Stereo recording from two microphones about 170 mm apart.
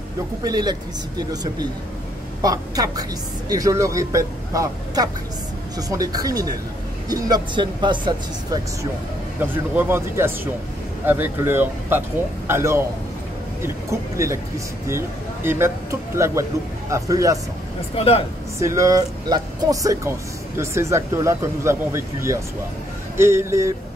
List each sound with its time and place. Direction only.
0.4 s a woman's voice: 25° right (ahead or behind)
9.4 s speech: 10° right (ahead or behind)
14.1 s a woman's voice: 15° right (ahead or behind)
17.9 s speech: 35° left (ahead or behind)
18.6 s speech: 20° right (ahead or behind)